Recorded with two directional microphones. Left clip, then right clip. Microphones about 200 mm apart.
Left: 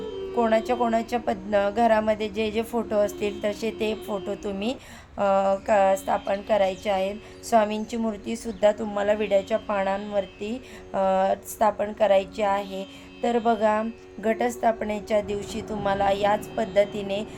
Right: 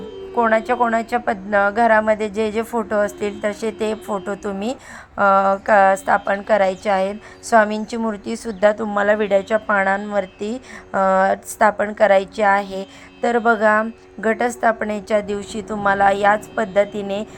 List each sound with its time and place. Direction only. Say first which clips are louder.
0.0 s a woman's voice: right 6 dB; centre (ahead or behind)
4.6 s a woman's voice: right 4 dB; 10° right (ahead or behind)